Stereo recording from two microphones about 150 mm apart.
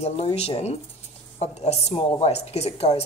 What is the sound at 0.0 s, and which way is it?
Speech, 40° left (ahead or behind).